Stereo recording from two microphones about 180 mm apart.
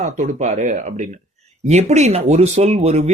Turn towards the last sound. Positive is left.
turn(degrees=-35)  # may be behind; listen again after turning